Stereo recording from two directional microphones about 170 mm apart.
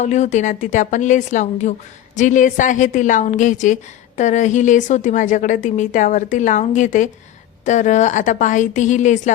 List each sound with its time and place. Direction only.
0.0 s a woman's voice: 45° left (ahead or behind)